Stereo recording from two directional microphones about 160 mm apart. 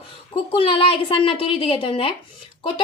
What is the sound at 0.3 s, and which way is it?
A woman's voice, 35° left (ahead or behind).